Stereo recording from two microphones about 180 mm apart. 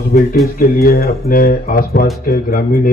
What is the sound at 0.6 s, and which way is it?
Speech, 55° left (ahead or behind).